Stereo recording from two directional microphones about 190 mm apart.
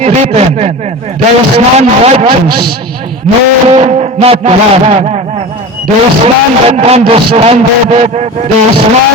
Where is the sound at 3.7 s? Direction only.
35° right (ahead or behind).